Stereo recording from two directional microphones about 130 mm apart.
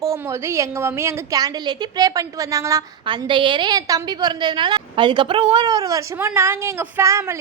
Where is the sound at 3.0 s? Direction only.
40° right (ahead or behind); by 7.4 s 20° right (ahead or behind).